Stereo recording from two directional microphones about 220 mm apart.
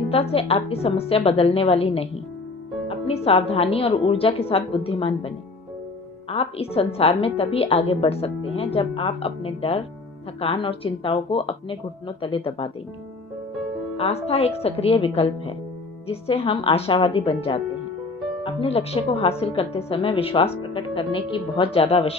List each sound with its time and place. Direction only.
0.1 s a woman's voice: 25° left (ahead or behind)
6.3 s a woman's voice: 25° left (ahead or behind)
13.9 s a woman's voice: 25° left (ahead or behind)